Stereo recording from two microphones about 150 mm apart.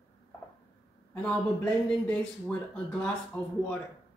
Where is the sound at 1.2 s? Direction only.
5° left (ahead or behind).